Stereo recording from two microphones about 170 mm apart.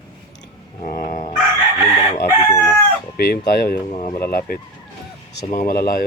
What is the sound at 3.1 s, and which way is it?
Speech, 65° left (ahead or behind).